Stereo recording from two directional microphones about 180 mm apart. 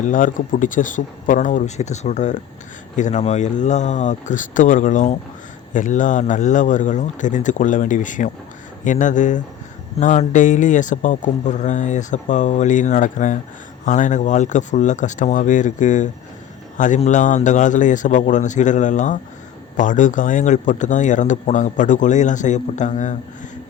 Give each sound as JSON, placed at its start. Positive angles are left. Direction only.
{"t": 0.0, "sound": "speech", "side_deg": 45}